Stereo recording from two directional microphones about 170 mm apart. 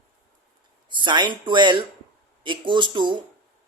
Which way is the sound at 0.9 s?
25° right (ahead or behind).